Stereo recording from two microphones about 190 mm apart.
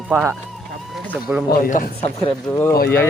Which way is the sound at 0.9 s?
5° right (ahead or behind).